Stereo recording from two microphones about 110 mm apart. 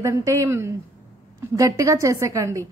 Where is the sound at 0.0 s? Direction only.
30° right (ahead or behind).